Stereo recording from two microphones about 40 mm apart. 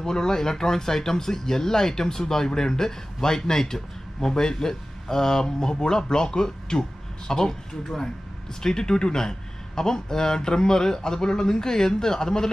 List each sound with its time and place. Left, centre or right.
0.0 s speech: centre